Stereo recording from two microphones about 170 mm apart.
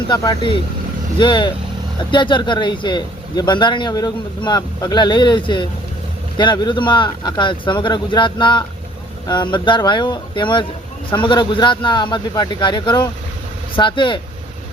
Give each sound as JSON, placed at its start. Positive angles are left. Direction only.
{"t": 0.1, "sound": "speech", "side_deg": 25}